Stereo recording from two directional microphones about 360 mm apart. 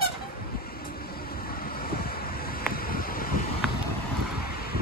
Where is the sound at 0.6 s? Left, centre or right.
Left.